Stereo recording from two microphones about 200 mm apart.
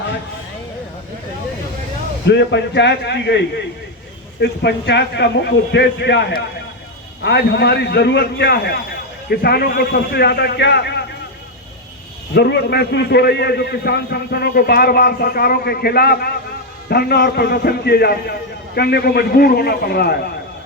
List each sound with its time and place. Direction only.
2.2 s a man's voice: 60° left (ahead or behind)
12.3 s a man's voice: 55° left (ahead or behind)